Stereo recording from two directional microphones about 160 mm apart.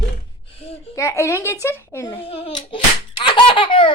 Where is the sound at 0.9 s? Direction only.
15° left (ahead or behind).